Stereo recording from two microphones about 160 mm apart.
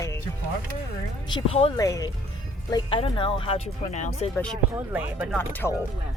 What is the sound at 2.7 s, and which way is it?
Speech, 30° left (ahead or behind).